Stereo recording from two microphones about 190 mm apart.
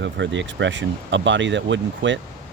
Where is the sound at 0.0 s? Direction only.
70° right (ahead or behind).